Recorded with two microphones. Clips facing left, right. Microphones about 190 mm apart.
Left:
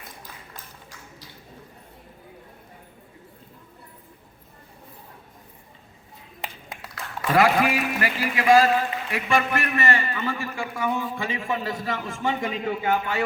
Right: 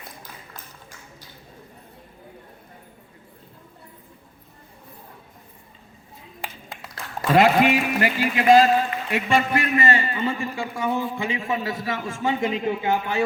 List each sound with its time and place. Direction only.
7.2 s a man's voice: 25° right (ahead or behind)